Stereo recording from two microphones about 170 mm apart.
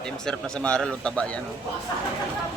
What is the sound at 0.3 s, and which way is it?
Speech, 5° left (ahead or behind).